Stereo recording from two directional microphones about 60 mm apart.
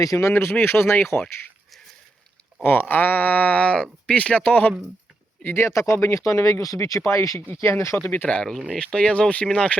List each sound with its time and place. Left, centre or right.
0.0 s speech: left
0.3 s speech: left
2.6 s speech: left
5.5 s speech: left
7.0 s speech: left
7.4 s speech: left
8.3 s speech: centre